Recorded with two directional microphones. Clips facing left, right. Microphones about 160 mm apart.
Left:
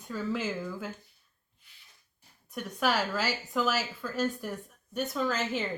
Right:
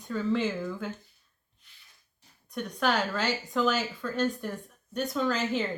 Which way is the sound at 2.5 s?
5° left (ahead or behind).